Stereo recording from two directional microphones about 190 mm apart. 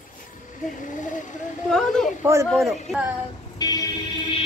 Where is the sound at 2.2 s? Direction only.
15° right (ahead or behind).